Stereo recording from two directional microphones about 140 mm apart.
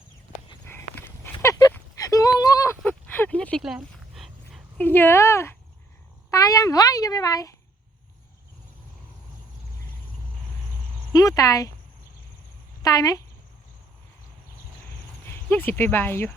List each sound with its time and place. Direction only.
0.7 s walk: 15° left (ahead or behind)
2.0 s a sound: 25° left (ahead or behind)
2.8 s a sound: 10° left (ahead or behind)
4.1 s dog: centre (ahead or behind)
4.8 s speech: 15° left (ahead or behind)
11.1 s speech: 25° left (ahead or behind)
12.8 s speech: 25° left (ahead or behind)
15.3 s speech: 15° left (ahead or behind)